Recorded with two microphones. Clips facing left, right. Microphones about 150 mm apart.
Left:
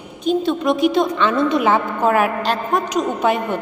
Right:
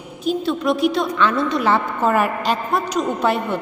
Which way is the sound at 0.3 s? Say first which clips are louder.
Left 2 dB; centre (ahead or behind).